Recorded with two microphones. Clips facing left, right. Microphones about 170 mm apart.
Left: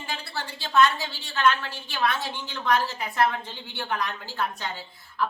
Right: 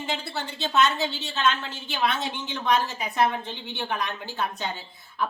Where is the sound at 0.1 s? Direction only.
20° right (ahead or behind).